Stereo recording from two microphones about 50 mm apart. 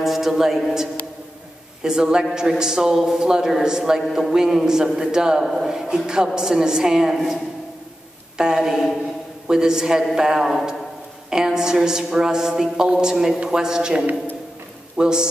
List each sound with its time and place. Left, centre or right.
0.0 s a man's voice: centre
1.8 s a woman's voice: centre
5.4 s a man's voice: centre
5.7 s a woman's voice: centre
8.4 s a woman's voice: centre